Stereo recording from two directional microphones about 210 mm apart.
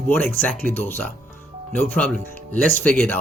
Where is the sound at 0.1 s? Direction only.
10° left (ahead or behind).